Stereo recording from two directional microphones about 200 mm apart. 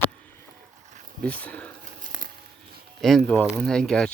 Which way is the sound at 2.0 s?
40° right (ahead or behind).